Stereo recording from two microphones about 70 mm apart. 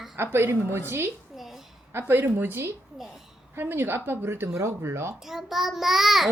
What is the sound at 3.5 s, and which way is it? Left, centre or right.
Speech, right.